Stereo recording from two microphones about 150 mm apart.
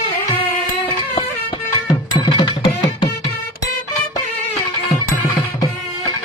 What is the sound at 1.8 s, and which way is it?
Music, 35° left (ahead or behind).